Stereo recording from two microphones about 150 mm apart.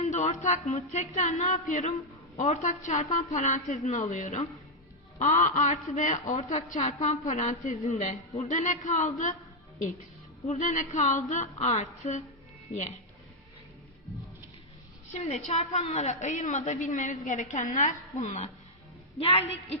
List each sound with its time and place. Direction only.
0.0 s a man's voice: 55° left (ahead or behind)
10.4 s a man's voice: 50° left (ahead or behind)
15.1 s a man's voice: 50° left (ahead or behind)